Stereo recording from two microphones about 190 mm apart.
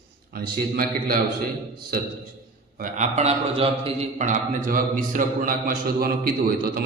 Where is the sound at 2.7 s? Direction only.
40° right (ahead or behind).